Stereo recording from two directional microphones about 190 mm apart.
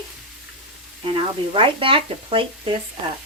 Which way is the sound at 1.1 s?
30° right (ahead or behind).